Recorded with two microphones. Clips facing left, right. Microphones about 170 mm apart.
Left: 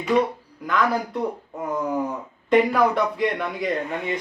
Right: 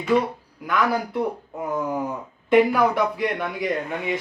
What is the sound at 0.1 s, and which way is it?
Speech, 20° left (ahead or behind).